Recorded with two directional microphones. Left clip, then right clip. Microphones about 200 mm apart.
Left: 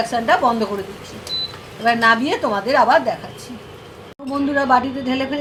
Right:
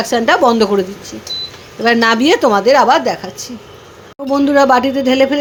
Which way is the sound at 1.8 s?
60° right (ahead or behind).